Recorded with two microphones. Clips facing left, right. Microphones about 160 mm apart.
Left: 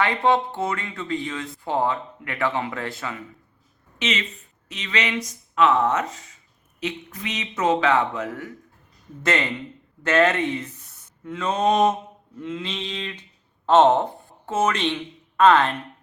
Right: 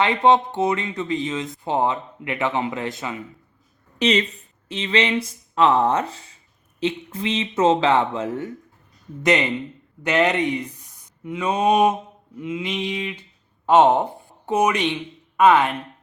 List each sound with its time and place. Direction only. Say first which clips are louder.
0.0 s speech: right 3 dB; 20° right (ahead or behind)
3.9 s speech: right 7 dB; 35° right (ahead or behind)
9.2 s a sound: right 4 dB; 20° right (ahead or behind)
13.7 s a woman's voice: right 1 dB; 10° right (ahead or behind)